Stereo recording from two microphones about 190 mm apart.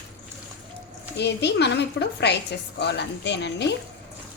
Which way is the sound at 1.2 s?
65° left (ahead or behind).